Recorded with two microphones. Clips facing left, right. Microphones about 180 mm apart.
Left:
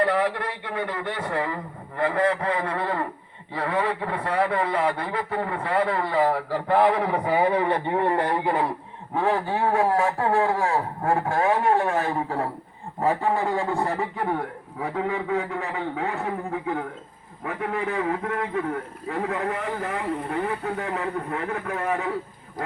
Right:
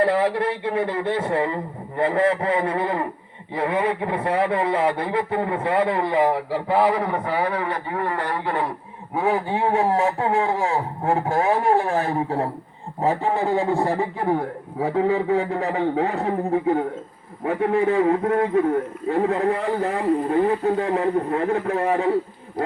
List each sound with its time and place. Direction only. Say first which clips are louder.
0.0 s a man's voice: right 4 dB; 25° right (ahead or behind); by 7.2 s centre (ahead or behind)
7.3 s speech: left 2 dB; 20° left (ahead or behind)
9.1 s a man's voice: right 2 dB; 10° right (ahead or behind); by 22.1 s 30° right (ahead or behind)